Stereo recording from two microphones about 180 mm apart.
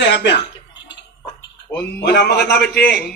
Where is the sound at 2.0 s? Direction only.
70° left (ahead or behind).